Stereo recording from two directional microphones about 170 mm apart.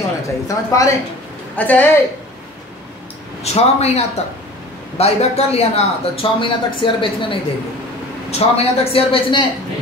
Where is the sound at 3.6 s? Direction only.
40° left (ahead or behind).